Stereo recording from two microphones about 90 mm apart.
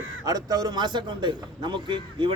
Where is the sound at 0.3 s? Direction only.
45° right (ahead or behind).